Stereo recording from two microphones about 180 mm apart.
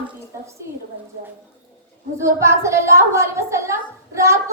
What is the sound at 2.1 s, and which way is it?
A woman's voice, 15° right (ahead or behind).